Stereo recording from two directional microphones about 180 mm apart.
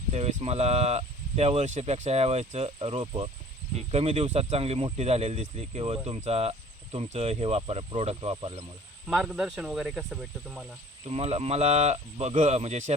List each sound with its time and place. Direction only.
0.1 s speech: 40° right (ahead or behind)
9.0 s speech: centre (ahead or behind)
11.0 s speech: 35° right (ahead or behind)